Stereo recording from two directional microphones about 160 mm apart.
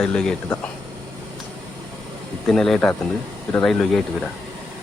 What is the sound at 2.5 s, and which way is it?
Speech, centre (ahead or behind).